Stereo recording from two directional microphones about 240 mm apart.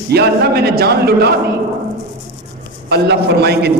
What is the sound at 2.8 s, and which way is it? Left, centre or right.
Speech, right.